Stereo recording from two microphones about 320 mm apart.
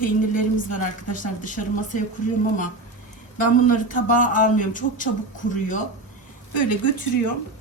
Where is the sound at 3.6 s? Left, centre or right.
Left.